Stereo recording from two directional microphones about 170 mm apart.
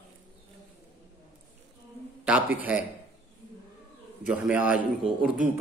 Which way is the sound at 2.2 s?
10° right (ahead or behind).